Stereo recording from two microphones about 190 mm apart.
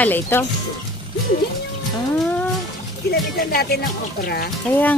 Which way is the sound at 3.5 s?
55° left (ahead or behind).